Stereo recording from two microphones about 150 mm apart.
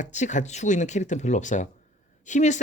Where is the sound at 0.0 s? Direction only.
55° left (ahead or behind).